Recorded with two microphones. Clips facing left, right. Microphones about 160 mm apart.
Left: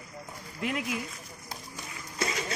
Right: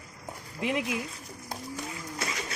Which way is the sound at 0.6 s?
20° right (ahead or behind).